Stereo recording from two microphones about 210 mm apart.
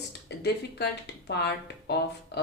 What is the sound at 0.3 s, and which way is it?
A woman's voice, 50° left (ahead or behind).